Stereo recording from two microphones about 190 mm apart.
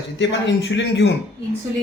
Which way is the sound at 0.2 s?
70° left (ahead or behind).